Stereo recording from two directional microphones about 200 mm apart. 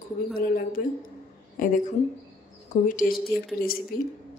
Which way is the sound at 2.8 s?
40° left (ahead or behind).